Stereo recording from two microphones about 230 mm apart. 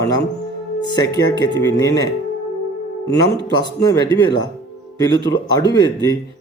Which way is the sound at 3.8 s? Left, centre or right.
Centre.